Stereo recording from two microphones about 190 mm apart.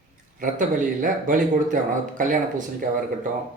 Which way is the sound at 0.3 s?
45° right (ahead or behind).